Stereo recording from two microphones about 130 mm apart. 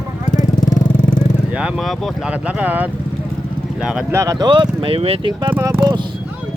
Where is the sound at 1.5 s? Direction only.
5° right (ahead or behind).